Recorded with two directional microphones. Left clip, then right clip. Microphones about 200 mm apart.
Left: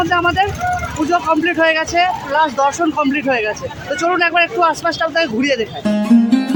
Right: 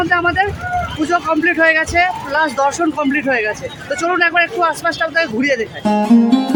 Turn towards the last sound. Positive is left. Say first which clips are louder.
# right 2 dB
turn(degrees=0)  # may be behind; listen again after turning